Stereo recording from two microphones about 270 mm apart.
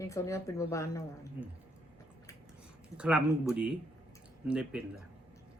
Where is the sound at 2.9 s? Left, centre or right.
Centre.